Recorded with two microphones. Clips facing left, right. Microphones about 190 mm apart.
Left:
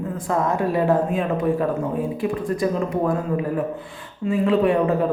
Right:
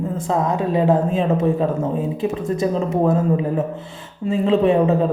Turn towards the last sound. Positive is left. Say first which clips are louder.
# right 3 dB
turn(degrees=-25)  # may be behind; listen again after turning